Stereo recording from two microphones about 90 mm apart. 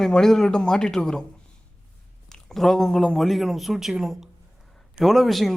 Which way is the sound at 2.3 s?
5° left (ahead or behind).